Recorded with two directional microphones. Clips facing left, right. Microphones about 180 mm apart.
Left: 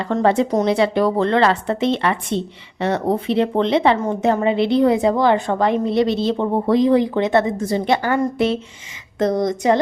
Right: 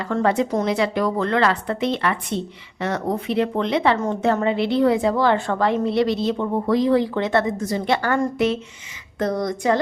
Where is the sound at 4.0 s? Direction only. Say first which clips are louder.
Left 2 dB; 15° left (ahead or behind).